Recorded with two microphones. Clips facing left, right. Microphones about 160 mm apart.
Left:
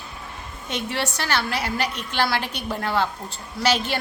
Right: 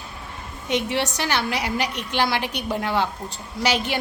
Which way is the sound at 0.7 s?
15° right (ahead or behind).